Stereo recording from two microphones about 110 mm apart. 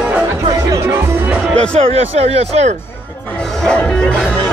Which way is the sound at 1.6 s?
65° right (ahead or behind).